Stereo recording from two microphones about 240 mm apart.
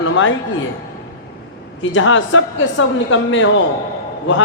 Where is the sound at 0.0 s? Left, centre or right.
Left.